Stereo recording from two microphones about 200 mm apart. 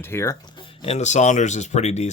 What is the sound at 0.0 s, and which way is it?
Speech, 15° left (ahead or behind).